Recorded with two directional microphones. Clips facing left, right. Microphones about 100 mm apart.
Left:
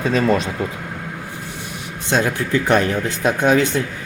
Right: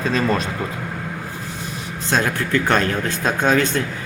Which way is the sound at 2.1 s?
20° left (ahead or behind).